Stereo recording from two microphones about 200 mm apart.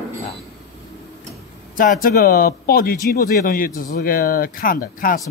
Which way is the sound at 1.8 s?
45° left (ahead or behind).